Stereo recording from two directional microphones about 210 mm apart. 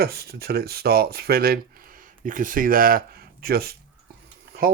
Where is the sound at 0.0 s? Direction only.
45° right (ahead or behind).